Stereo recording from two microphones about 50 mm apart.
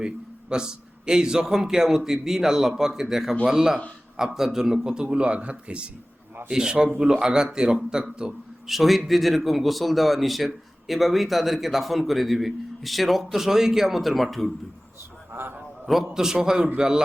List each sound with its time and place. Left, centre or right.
0.5 s a man's voice: centre
15.3 s a sound: right
15.9 s a man's voice: centre